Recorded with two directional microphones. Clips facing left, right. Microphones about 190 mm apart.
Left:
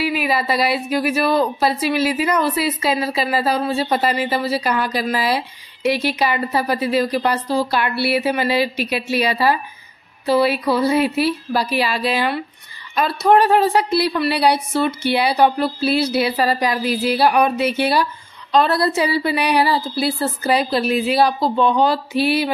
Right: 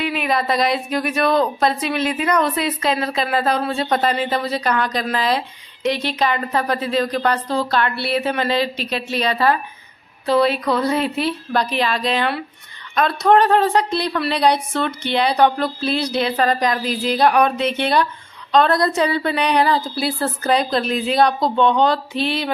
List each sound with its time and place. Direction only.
0.0 s a woman's voice: 5° left (ahead or behind)